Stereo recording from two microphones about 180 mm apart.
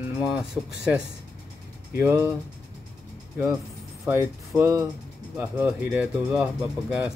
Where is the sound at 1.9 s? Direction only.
15° right (ahead or behind).